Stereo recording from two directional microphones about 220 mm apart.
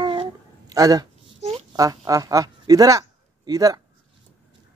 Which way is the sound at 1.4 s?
20° right (ahead or behind).